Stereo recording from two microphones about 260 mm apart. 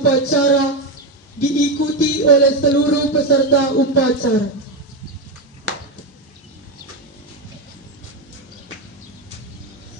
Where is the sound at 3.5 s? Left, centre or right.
Left.